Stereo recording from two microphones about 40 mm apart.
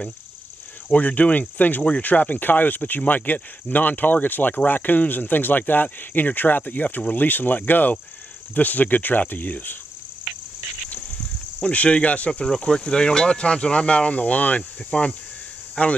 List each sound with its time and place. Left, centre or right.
0.8 s speech: left
11.6 s speech: left
12.3 s speech: centre
15.8 s speech: left